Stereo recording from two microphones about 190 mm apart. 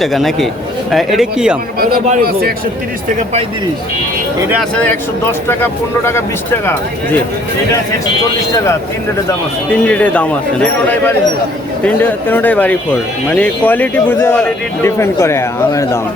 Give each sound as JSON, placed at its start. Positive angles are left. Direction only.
{"t": 0.0, "sound": "speech", "side_deg": 0}
{"t": 1.8, "sound": "a man's voice", "side_deg": -45}
{"t": 4.7, "sound": "speech", "side_deg": 5}
{"t": 9.8, "sound": "speech", "side_deg": 5}